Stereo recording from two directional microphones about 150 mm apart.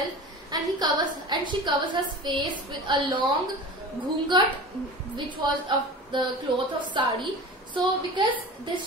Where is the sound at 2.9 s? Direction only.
30° right (ahead or behind).